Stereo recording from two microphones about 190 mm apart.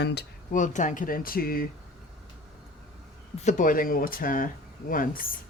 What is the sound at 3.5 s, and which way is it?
Speech, 45° left (ahead or behind).